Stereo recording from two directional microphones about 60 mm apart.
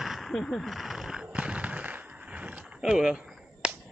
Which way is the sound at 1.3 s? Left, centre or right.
Centre.